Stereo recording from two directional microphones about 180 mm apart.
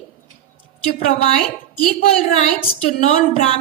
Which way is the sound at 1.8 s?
40° left (ahead or behind).